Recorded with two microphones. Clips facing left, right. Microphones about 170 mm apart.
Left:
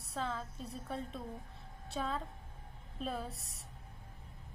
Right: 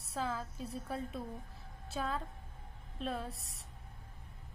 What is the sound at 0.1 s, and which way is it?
A woman's voice, 5° right (ahead or behind).